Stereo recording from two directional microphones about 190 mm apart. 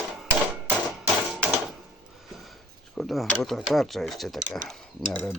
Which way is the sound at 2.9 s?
Centre (ahead or behind).